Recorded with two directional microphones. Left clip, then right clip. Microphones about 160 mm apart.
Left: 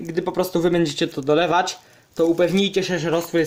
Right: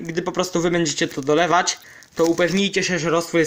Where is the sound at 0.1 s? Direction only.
Centre (ahead or behind).